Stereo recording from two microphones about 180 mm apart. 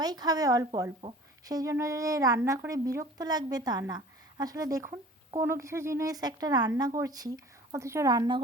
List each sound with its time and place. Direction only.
0.0 s speech: 20° right (ahead or behind)